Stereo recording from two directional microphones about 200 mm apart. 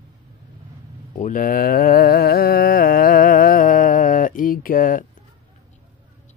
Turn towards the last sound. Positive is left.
turn(degrees=45)  # may be behind; listen again after turning